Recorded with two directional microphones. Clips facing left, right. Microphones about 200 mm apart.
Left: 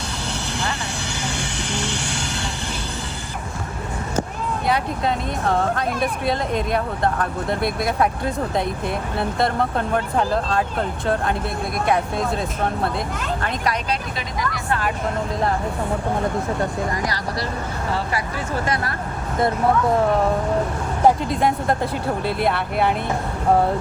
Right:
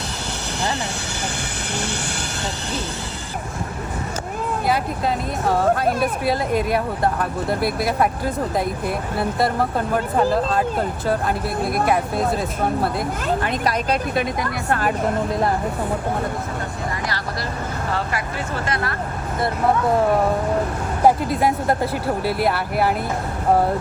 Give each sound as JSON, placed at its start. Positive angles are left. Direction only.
{"t": 4.6, "sound": "speech", "side_deg": 0}
{"t": 13.9, "sound": "speech", "side_deg": -55}
{"t": 21.0, "sound": "speech", "side_deg": -5}